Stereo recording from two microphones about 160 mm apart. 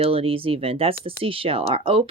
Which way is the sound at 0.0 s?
35° right (ahead or behind).